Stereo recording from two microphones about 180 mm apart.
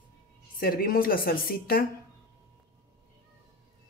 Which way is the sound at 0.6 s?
55° left (ahead or behind).